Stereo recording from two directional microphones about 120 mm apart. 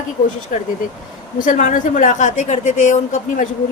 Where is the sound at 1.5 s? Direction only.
90° left.